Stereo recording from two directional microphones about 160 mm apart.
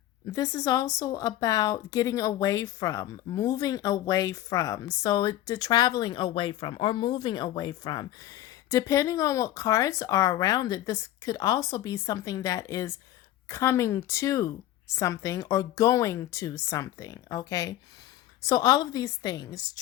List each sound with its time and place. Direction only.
0.3 s a woman's voice: 20° left (ahead or behind)